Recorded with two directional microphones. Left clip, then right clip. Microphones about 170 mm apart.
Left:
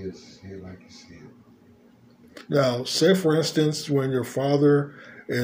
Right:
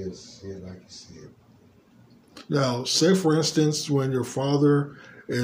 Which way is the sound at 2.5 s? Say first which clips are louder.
Left 2 dB; 20° right (ahead or behind).